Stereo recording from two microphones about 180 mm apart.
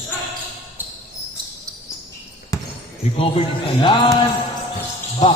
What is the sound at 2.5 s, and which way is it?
Basketball bounce, 20° left (ahead or behind).